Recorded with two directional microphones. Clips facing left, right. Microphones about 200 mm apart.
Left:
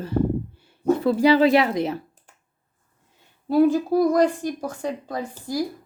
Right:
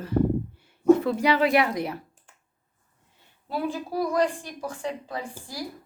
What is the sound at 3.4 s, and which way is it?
A woman's voice, 45° left (ahead or behind).